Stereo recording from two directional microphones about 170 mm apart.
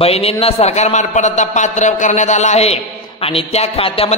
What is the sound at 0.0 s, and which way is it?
A man's voice, 35° left (ahead or behind).